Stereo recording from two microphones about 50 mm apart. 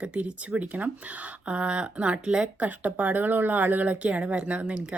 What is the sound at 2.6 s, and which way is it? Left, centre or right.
Speech, right.